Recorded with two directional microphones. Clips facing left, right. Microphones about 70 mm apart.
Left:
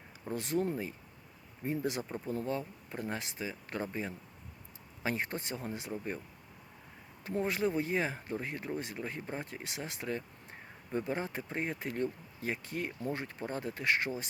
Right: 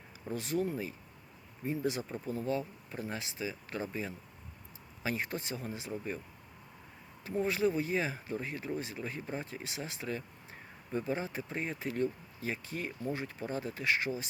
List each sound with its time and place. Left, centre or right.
0.3 s speech: left
7.3 s speech: left